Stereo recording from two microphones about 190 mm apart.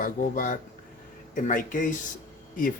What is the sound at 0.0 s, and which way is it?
Speech, 45° left (ahead or behind).